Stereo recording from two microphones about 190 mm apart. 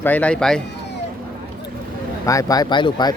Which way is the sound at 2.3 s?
20° left (ahead or behind).